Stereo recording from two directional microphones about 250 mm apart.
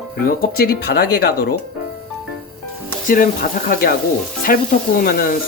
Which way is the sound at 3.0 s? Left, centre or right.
Left.